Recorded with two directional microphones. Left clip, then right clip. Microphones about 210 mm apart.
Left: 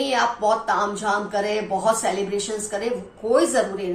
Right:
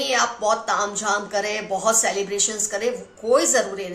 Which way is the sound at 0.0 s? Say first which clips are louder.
Left 1 dB; 45° right (ahead or behind).